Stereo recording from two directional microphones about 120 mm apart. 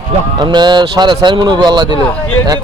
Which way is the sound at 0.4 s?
40° right (ahead or behind).